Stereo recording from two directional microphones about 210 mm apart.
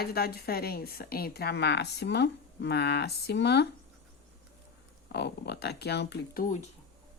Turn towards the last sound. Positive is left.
turn(degrees=50)  # may be behind; listen again after turning